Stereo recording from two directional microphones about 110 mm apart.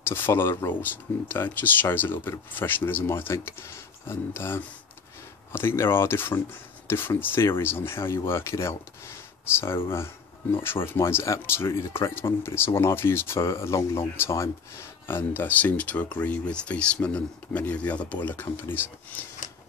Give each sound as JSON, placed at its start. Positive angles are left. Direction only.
{"t": 0.1, "sound": "speech", "side_deg": 20}
{"t": 9.8, "sound": "speech", "side_deg": 20}